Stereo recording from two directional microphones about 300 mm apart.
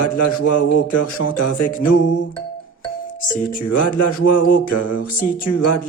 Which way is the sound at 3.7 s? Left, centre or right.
Left.